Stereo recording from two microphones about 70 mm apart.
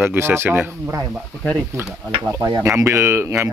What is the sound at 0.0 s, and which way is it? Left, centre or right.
Speech, right.